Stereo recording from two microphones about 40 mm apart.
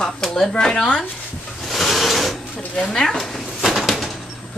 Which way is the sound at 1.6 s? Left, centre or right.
Centre.